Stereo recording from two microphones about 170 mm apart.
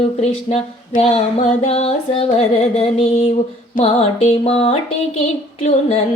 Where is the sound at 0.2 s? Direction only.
40° left (ahead or behind).